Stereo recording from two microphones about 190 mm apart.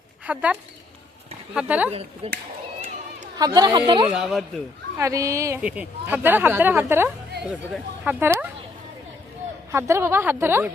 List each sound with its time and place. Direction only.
0.3 s a woman's voice: 5° right (ahead or behind)
1.9 s speech: 30° right (ahead or behind)
3.3 s speech: 20° right (ahead or behind)
4.1 s speech: centre (ahead or behind)
4.9 s a woman's voice: 15° right (ahead or behind)
9.7 s a woman's voice: 15° right (ahead or behind)